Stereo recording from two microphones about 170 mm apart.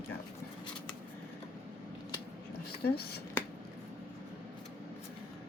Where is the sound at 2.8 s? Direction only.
70° left (ahead or behind).